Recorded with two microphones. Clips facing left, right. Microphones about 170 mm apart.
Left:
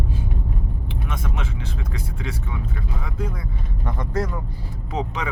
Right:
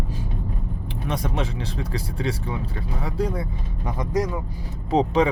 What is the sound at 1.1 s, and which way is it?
Speech, 35° right (ahead or behind).